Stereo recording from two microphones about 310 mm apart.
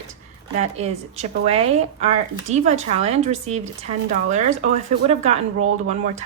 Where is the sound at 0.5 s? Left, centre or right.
Right.